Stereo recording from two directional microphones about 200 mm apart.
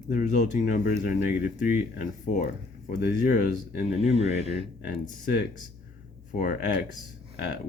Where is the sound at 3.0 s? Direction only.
50° left (ahead or behind).